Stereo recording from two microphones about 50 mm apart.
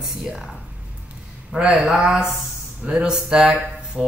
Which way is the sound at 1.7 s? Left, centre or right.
Centre.